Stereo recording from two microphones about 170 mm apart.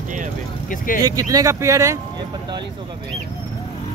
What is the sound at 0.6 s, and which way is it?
Speech, 55° left (ahead or behind).